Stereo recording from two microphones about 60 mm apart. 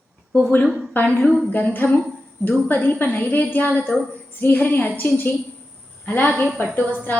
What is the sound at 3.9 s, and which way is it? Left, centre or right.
Speech, centre.